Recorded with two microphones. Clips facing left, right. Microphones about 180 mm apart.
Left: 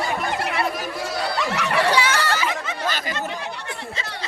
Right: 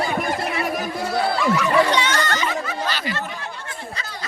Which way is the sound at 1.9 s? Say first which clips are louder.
Even; 10° left (ahead or behind).